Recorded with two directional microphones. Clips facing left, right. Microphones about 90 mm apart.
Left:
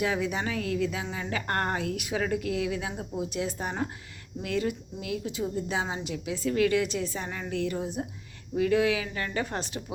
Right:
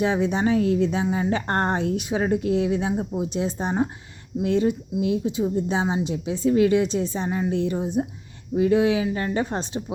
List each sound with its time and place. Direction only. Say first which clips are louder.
0.0 s speech: right 7 dB; 25° right (ahead or behind)